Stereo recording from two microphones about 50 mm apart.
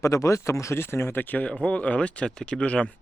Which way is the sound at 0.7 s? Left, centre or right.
Left.